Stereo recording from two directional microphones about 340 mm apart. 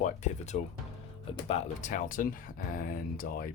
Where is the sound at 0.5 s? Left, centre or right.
Left.